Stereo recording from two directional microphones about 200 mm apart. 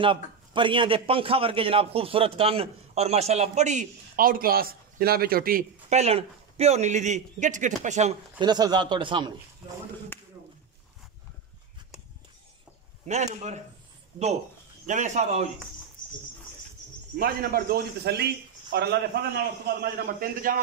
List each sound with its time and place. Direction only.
0.0 s a man's voice: 25° right (ahead or behind)
8.4 s speech: 20° right (ahead or behind)
13.0 s a man's voice: 35° right (ahead or behind)
17.2 s a man's voice: 50° right (ahead or behind)